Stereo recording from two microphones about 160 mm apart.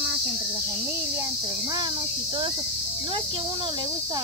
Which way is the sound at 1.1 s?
20° right (ahead or behind).